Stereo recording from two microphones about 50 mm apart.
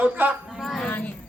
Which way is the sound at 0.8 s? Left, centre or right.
Left.